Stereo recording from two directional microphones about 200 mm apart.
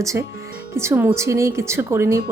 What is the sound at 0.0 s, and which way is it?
Speech, 15° right (ahead or behind).